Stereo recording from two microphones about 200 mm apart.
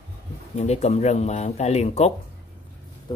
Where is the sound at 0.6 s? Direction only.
35° left (ahead or behind).